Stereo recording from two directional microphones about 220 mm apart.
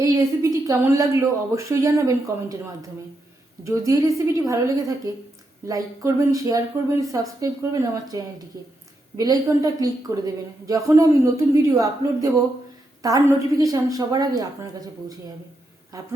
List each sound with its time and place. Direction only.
0.0 s a woman's voice: 15° right (ahead or behind)